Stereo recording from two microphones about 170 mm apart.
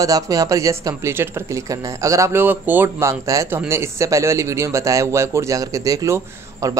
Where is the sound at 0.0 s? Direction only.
20° right (ahead or behind).